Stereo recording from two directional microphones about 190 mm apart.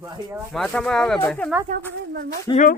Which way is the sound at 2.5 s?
20° left (ahead or behind).